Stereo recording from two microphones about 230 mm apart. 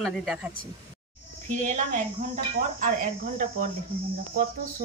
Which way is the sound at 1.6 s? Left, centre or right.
Right.